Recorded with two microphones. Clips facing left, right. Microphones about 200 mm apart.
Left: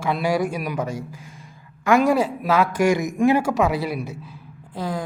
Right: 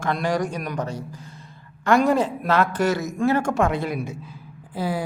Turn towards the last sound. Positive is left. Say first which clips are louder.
# right 1 dB
turn(degrees=-5)  # may be behind; listen again after turning